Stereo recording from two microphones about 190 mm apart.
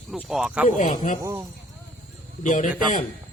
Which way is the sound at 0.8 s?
40° left (ahead or behind).